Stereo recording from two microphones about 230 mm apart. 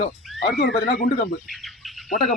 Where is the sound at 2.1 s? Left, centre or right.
Left.